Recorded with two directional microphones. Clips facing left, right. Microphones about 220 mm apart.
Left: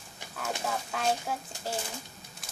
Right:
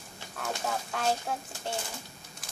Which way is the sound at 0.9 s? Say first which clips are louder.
Even; centre (ahead or behind).